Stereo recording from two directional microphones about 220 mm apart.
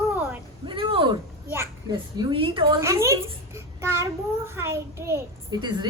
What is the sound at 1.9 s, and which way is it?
Speech, 20° right (ahead or behind).